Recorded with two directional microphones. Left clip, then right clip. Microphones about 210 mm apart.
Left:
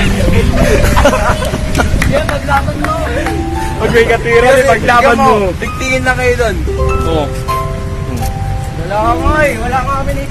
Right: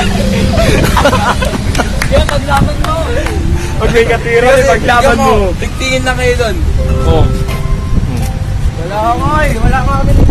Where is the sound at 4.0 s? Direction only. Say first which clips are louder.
Left 1 dB; 30° left (ahead or behind).